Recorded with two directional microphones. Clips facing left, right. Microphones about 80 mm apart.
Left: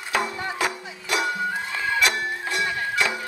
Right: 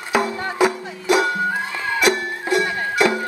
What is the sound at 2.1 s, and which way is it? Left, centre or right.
Music, right.